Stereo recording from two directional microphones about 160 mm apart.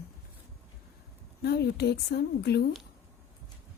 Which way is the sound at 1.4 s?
90° left.